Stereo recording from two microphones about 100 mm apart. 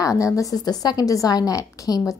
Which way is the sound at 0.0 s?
35° left (ahead or behind).